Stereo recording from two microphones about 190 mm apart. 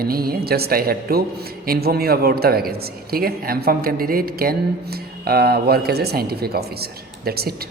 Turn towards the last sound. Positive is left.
turn(degrees=-55)  # may be behind; listen again after turning